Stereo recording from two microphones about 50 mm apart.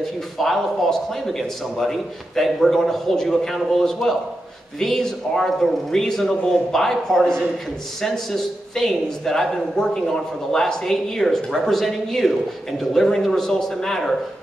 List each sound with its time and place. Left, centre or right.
0.0 s a man's voice: centre